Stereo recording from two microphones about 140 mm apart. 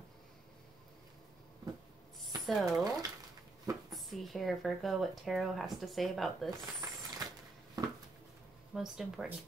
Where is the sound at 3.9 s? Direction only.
Centre (ahead or behind).